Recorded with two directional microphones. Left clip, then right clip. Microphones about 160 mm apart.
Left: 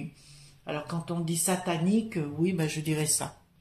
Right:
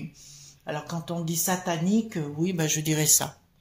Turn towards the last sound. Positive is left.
turn(degrees=-50)  # may be behind; listen again after turning